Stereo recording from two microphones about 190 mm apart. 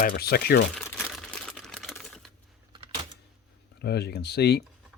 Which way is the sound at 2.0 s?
Centre (ahead or behind).